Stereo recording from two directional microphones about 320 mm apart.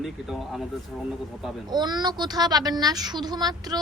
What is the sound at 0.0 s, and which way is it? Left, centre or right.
Speech, centre.